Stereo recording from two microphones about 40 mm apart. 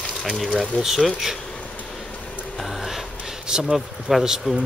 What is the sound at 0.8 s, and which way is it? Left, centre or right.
Speech, centre.